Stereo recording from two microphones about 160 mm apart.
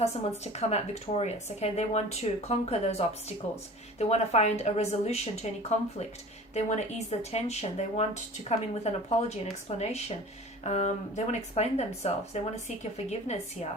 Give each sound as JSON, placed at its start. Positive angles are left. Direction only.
{"t": 0.0, "sound": "speech", "side_deg": 40}